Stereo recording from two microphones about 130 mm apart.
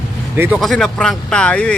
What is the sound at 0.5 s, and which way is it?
Speech, centre (ahead or behind).